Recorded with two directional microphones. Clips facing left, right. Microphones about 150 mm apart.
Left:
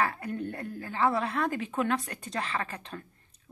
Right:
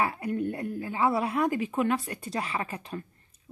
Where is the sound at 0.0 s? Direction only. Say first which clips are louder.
Right 2 dB; 10° right (ahead or behind).